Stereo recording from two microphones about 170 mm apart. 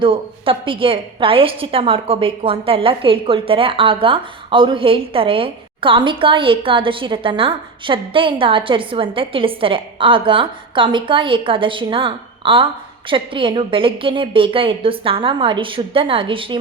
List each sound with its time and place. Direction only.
0.0 s a woman's voice: 30° right (ahead or behind)